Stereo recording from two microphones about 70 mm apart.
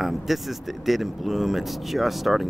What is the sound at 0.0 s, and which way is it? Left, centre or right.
Speech, centre.